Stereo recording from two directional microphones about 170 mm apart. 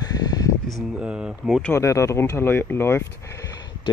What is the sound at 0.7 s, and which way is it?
Speech, 5° right (ahead or behind).